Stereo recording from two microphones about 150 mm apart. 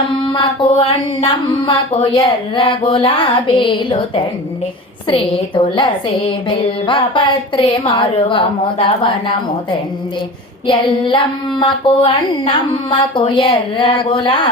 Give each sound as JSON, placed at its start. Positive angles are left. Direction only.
{"t": 0.8, "sound": "speech", "side_deg": 35}
{"t": 10.7, "sound": "speech", "side_deg": 35}